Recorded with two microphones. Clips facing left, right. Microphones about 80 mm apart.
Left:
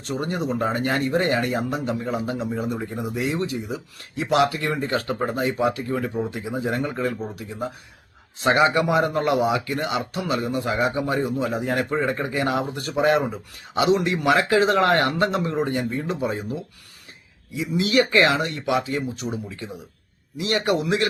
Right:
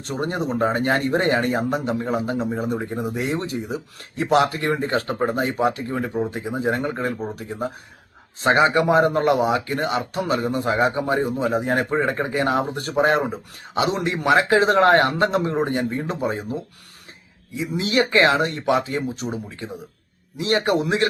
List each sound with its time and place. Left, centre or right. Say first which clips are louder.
0.1 s speech: right 1 dB; right
8.4 s speech: right 1 dB; right
17.6 s speech: left 1 dB; right